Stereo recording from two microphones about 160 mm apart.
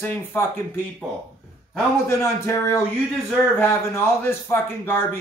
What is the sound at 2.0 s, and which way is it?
A man's voice, 15° left (ahead or behind).